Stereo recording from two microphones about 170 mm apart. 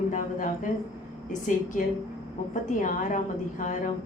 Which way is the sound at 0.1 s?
50° left (ahead or behind).